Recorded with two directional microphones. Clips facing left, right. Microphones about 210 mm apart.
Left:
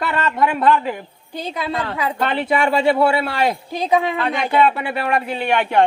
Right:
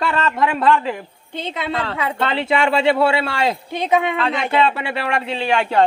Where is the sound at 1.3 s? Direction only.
25° right (ahead or behind).